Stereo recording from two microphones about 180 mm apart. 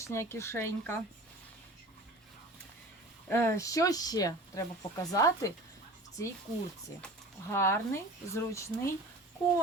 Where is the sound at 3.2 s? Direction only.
10° left (ahead or behind).